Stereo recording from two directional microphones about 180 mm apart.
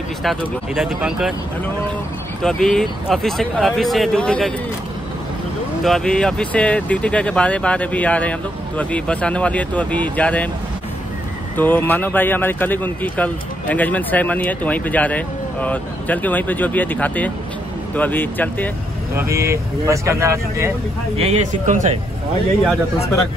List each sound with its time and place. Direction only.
0.2 s speech: centre (ahead or behind)
2.4 s speech: centre (ahead or behind)
5.9 s speech: 5° left (ahead or behind)
11.5 s speech: 10° left (ahead or behind)
19.1 s speech: 15° right (ahead or behind)
21.2 s speech: 40° right (ahead or behind)